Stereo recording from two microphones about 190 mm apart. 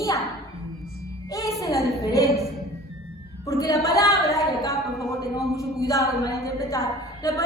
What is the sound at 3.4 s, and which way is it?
Speech, 15° left (ahead or behind).